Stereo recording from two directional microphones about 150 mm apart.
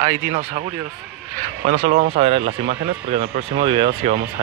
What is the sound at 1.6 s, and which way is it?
Speech, 65° right (ahead or behind).